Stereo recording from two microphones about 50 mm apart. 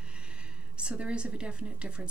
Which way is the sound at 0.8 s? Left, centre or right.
Right.